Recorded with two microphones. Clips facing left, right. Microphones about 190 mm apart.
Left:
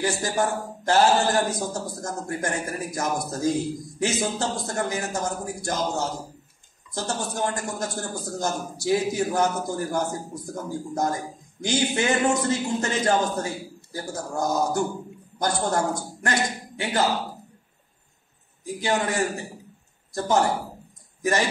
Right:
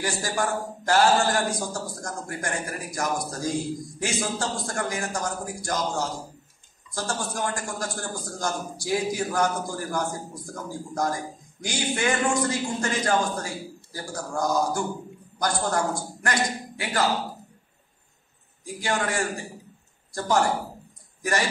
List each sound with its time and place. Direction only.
0.0 s a man's voice: 25° left (ahead or behind)
18.6 s a man's voice: 20° left (ahead or behind)